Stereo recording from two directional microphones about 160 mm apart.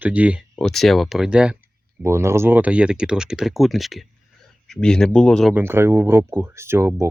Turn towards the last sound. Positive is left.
turn(degrees=-15)  # may be behind; listen again after turning